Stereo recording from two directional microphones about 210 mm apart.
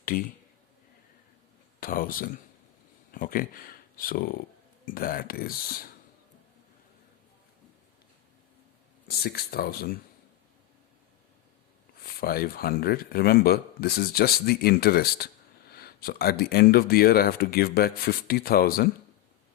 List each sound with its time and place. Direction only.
0.0 s a man's voice: 40° left (ahead or behind)
1.8 s speech: 40° left (ahead or behind)
9.0 s speech: 50° left (ahead or behind)
12.0 s speech: 45° left (ahead or behind)